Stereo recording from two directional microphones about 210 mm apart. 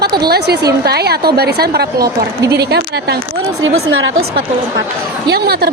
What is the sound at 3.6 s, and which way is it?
Speech, 60° right (ahead or behind).